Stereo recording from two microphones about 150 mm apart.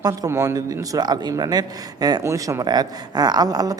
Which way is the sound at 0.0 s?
20° right (ahead or behind).